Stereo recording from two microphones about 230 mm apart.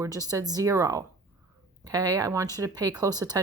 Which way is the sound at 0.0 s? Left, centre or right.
Centre.